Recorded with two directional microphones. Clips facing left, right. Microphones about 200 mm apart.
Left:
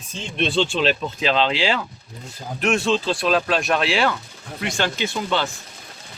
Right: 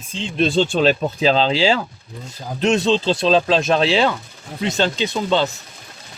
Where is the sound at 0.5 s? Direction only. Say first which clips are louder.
Right 3 dB; 40° right (ahead or behind).